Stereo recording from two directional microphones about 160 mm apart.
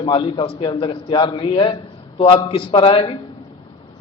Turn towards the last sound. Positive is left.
turn(degrees=35)  # may be behind; listen again after turning